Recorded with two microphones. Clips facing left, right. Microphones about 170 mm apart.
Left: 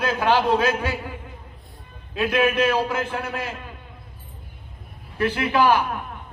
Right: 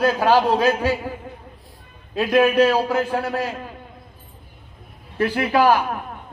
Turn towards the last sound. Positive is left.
turn(degrees=-45)  # may be behind; listen again after turning